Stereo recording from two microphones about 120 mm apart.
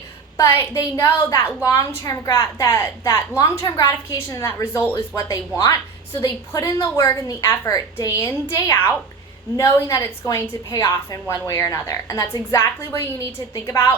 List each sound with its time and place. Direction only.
0.3 s a woman's voice: 25° left (ahead or behind)
5.1 s a woman's voice: 30° left (ahead or behind)